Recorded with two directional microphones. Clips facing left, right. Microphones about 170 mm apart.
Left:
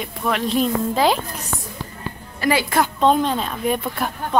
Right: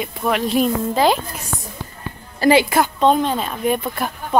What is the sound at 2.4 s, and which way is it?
Speech, 25° right (ahead or behind).